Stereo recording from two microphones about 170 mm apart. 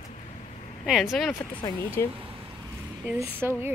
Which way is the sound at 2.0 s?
15° left (ahead or behind).